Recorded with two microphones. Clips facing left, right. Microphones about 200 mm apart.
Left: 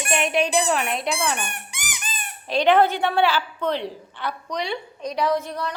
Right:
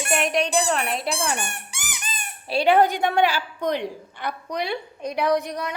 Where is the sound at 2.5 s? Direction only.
10° right (ahead or behind).